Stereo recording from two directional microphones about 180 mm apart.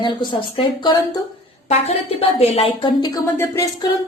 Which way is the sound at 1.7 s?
35° left (ahead or behind).